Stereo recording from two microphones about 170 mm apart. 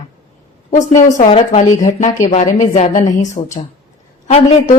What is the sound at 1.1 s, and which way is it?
Speech, 35° left (ahead or behind).